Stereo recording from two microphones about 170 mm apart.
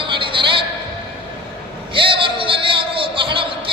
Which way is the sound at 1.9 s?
30° right (ahead or behind).